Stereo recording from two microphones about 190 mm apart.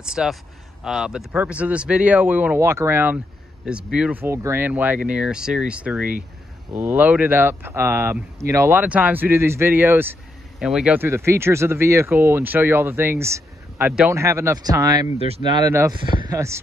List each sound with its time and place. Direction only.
0.0 s speech: 5° right (ahead or behind); by 15.1 s 20° right (ahead or behind)
15.1 s speech: 30° right (ahead or behind); by 16.6 s 15° right (ahead or behind)